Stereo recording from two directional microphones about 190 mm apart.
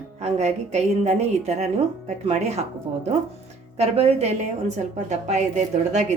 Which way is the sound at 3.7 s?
35° right (ahead or behind).